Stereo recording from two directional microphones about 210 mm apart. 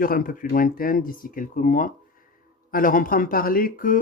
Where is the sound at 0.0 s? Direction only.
40° left (ahead or behind).